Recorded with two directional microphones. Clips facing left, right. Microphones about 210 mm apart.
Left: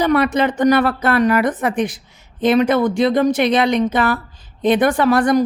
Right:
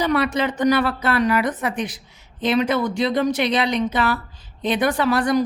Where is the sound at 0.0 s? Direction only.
50° left (ahead or behind).